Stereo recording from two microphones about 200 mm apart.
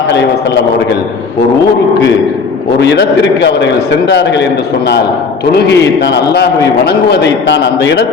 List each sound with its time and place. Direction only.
0.1 s a man's voice: 60° left (ahead or behind)
2.7 s a man's voice: 60° left (ahead or behind)
5.5 s a man's voice: 55° left (ahead or behind)